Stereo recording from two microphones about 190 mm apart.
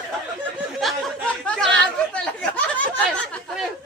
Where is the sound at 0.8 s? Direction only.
Centre (ahead or behind).